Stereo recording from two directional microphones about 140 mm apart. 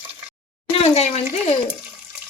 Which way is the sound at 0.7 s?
45° left (ahead or behind).